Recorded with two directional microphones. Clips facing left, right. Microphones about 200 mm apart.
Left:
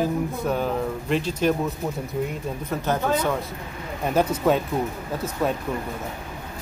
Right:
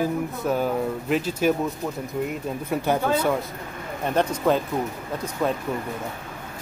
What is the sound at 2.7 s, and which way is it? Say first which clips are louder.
Speech: right 1 dB; 10° right (ahead or behind).